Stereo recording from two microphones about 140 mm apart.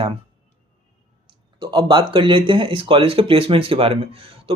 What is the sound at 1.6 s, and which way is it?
Speech, 35° right (ahead or behind).